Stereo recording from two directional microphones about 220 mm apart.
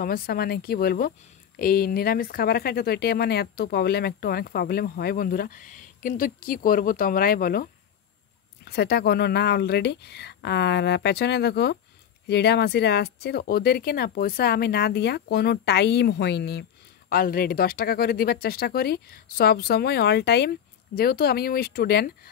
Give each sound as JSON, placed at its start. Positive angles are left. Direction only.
{"t": 0.0, "sound": "speech", "side_deg": 45}
{"t": 8.6, "sound": "speech", "side_deg": 45}